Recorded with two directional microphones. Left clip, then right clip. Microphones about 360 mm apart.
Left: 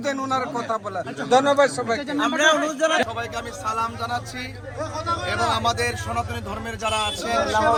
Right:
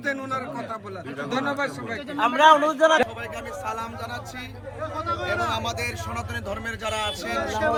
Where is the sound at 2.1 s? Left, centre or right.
Right.